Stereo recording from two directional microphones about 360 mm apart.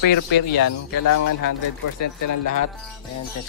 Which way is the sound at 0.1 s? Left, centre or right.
Left.